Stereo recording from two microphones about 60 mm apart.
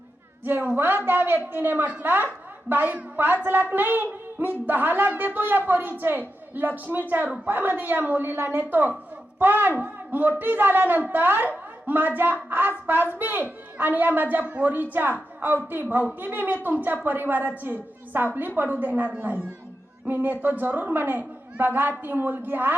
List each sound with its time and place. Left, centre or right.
0.4 s a woman's voice: right